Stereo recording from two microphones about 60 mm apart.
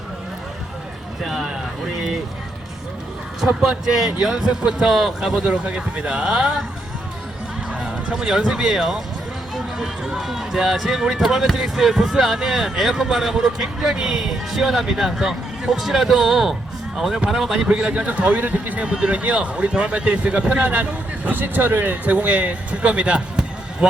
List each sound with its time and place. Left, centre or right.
1.2 s speech: centre
2.0 s a sound: centre
3.4 s a man's voice: centre
7.7 s speech: centre
17.7 s a man's voice: centre
21.2 s a man's voice: right